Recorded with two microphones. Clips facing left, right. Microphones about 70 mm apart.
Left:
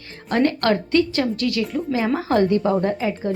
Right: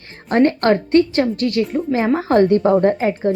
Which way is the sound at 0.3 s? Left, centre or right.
Right.